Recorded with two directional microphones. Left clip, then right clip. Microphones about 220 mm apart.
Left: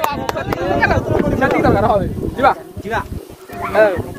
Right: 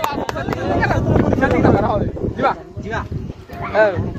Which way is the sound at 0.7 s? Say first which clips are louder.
Left 2 dB; 40° left (ahead or behind).